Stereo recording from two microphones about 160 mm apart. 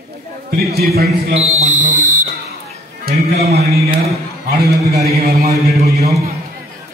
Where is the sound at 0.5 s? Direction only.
75° right (ahead or behind).